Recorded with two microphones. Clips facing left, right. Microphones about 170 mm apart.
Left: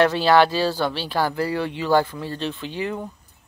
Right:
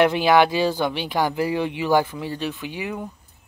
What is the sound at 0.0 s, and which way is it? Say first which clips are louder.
Speech: even; 15° right (ahead or behind).